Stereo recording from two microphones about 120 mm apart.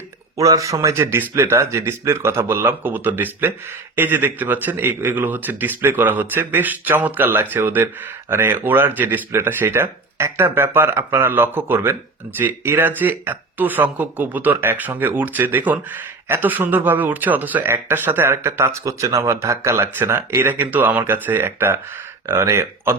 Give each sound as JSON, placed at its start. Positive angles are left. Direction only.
{"t": 0.3, "sound": "speech", "side_deg": -30}